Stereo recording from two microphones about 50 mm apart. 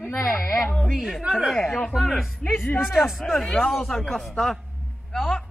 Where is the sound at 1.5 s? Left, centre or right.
Centre.